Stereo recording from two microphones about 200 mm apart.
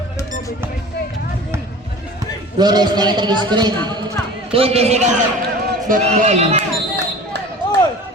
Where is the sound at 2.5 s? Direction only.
20° right (ahead or behind).